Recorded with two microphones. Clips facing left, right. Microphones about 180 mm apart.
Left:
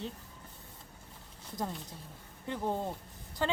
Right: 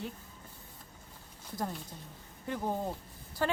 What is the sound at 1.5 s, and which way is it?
Speech, centre (ahead or behind).